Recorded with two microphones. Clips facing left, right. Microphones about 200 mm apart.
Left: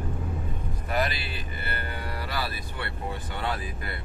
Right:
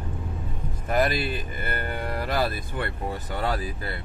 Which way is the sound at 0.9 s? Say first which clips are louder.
Right 6 dB; 50° right (ahead or behind).